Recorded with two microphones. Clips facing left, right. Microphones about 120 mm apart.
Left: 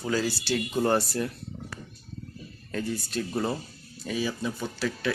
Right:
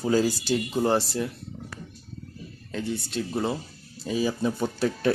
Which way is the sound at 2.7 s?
20° right (ahead or behind).